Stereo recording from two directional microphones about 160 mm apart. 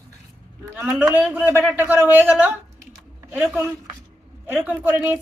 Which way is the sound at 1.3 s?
15° right (ahead or behind).